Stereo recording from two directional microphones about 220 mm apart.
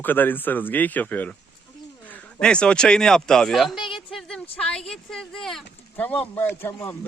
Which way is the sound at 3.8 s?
25° left (ahead or behind).